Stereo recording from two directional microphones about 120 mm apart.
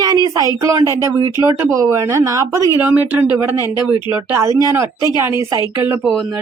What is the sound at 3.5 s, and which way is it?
Speech, 30° left (ahead or behind).